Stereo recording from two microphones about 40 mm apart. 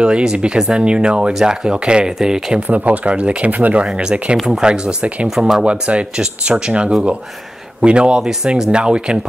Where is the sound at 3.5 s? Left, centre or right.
Right.